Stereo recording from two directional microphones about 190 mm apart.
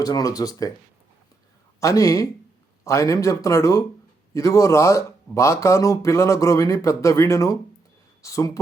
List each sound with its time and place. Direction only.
0.0 s speech: 20° left (ahead or behind)
1.8 s speech: 15° left (ahead or behind)